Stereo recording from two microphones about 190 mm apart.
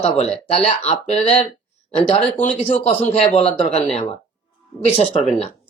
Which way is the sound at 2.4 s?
35° left (ahead or behind).